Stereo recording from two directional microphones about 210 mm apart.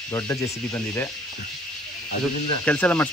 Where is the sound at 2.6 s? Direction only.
5° left (ahead or behind).